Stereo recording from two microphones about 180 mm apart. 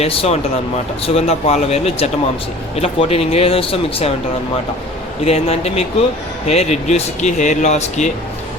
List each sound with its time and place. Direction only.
0.0 s speech: 35° left (ahead or behind)
5.2 s speech: 35° left (ahead or behind)